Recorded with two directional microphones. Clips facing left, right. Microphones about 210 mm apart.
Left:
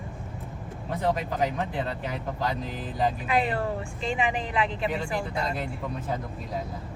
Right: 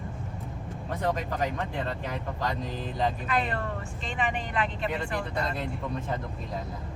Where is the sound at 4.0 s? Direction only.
Centre (ahead or behind).